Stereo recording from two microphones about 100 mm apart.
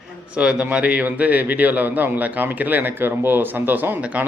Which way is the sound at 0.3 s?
10° right (ahead or behind).